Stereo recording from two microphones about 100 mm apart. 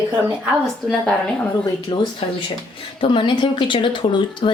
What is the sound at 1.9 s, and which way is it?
Speech, 55° left (ahead or behind).